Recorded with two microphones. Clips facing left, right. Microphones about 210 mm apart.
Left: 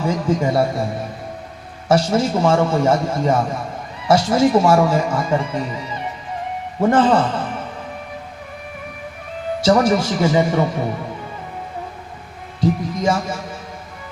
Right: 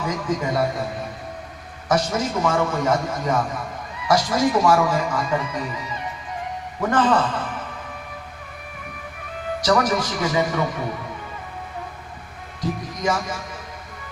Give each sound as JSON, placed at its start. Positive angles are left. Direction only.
{"t": 0.0, "sound": "speech", "side_deg": 30}
{"t": 1.9, "sound": "speech", "side_deg": 30}
{"t": 9.6, "sound": "speech", "side_deg": 25}
{"t": 12.5, "sound": "speech", "side_deg": 25}